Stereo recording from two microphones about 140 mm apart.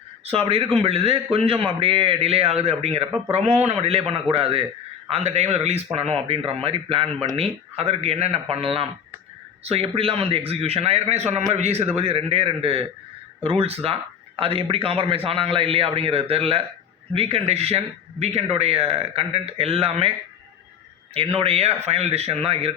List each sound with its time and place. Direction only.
0.3 s speech: 45° right (ahead or behind)